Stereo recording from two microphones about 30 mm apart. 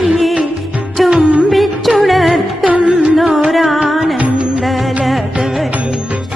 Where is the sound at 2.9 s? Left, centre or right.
Right.